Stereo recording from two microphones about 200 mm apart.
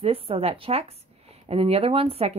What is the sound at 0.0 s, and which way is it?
Speech, 30° right (ahead or behind).